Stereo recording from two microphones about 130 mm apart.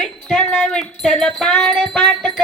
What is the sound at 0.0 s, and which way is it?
Wind chime, 5° left (ahead or behind).